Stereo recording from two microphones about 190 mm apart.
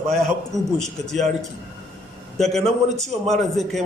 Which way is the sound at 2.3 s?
Centre (ahead or behind).